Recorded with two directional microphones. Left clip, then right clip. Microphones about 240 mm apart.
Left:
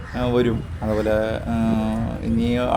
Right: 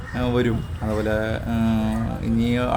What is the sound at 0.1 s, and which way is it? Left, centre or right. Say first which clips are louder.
Speech: left 2 dB; centre.